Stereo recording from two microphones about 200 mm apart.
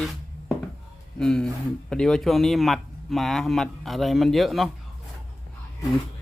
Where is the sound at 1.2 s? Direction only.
5° left (ahead or behind).